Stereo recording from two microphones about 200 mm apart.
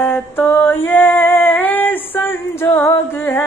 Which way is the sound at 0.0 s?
10° left (ahead or behind).